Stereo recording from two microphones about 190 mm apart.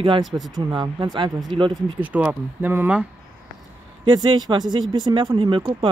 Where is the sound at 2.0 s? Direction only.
10° right (ahead or behind).